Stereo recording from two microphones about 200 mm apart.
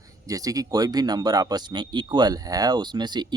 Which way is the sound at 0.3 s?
15° right (ahead or behind).